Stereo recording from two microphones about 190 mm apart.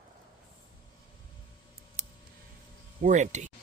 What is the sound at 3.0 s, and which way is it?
Speech, 40° right (ahead or behind).